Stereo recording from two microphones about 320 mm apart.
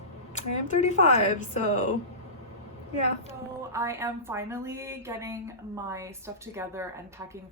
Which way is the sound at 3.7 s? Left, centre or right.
Centre.